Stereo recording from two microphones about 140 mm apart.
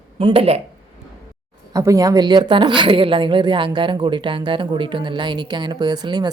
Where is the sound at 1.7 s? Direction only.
25° right (ahead or behind).